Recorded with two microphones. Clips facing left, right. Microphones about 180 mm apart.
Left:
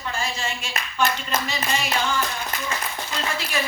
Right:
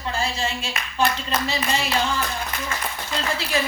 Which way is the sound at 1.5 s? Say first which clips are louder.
Right 2 dB; 30° right (ahead or behind).